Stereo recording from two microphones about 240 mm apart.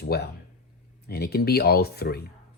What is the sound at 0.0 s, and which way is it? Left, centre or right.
Speech, left.